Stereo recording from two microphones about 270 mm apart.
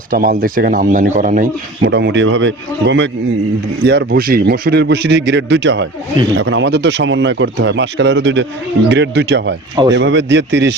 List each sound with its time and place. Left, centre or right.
0.1 s speech: right